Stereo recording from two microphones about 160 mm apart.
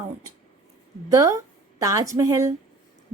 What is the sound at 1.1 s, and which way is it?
A woman's voice, 20° right (ahead or behind).